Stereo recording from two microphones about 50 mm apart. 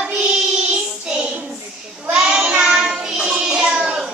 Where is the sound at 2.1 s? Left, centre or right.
Centre.